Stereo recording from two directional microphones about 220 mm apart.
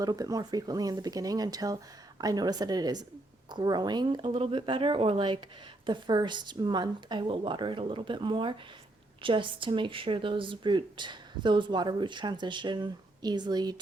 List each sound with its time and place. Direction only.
0.0 s speech: 15° right (ahead or behind)